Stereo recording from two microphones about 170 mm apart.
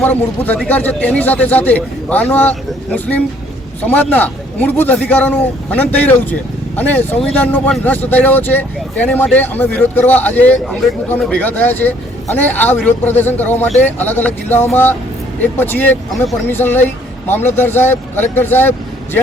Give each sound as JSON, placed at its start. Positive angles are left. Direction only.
{"t": 0.0, "sound": "speech", "side_deg": 10}